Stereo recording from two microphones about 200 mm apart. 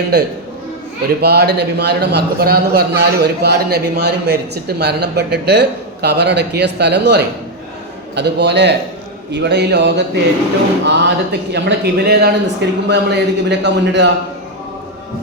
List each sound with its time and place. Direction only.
0.1 s a man's voice: 55° right (ahead or behind)